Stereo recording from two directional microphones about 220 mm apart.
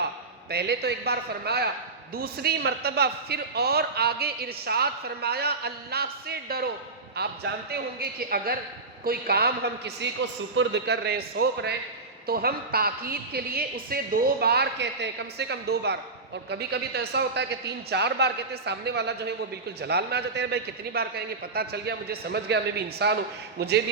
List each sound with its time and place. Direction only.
0.5 s a man's voice: 50° right (ahead or behind)